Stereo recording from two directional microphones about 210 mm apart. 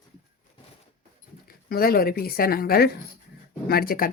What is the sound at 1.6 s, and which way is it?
Speech, 45° left (ahead or behind).